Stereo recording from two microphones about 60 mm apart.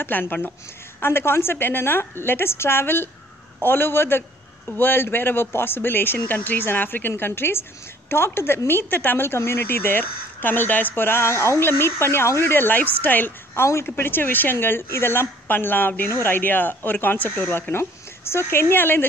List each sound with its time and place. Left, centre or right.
0.0 s speech: left
1.0 s speech: left
13.6 s speech: left